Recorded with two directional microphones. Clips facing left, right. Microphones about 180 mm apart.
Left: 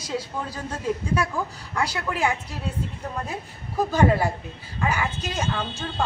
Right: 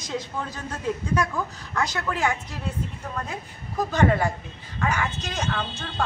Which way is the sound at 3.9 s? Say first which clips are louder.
Left 1 dB; 10° left (ahead or behind).